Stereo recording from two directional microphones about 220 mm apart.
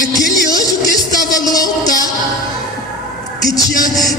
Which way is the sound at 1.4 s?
15° left (ahead or behind).